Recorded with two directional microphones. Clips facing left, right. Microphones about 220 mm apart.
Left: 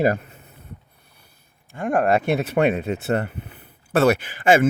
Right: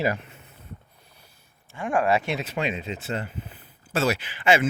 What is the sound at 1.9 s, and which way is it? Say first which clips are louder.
Speech: left 4 dB; 55° left (ahead or behind).